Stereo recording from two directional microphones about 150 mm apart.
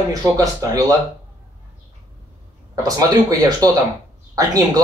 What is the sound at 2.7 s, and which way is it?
Speech, 25° right (ahead or behind).